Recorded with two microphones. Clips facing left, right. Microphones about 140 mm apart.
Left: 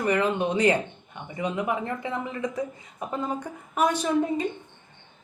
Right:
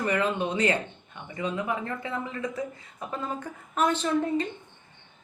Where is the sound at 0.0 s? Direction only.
10° left (ahead or behind).